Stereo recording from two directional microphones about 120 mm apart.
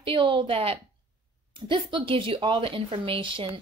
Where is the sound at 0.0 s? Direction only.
45° right (ahead or behind).